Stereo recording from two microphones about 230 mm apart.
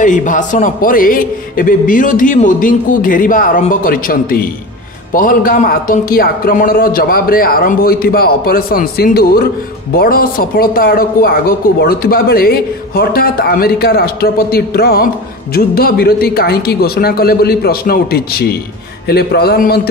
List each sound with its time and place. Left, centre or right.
0.0 s a man's voice: left